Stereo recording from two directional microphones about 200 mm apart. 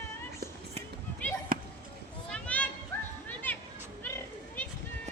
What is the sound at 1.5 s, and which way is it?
Basketball bounce, 45° right (ahead or behind).